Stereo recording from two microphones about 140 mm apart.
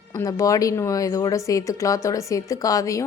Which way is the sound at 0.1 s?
25° left (ahead or behind).